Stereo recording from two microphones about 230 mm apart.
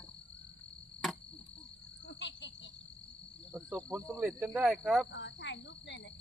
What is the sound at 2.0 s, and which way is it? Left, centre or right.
Cricket, left.